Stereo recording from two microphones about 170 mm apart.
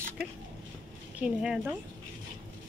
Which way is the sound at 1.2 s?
5° right (ahead or behind).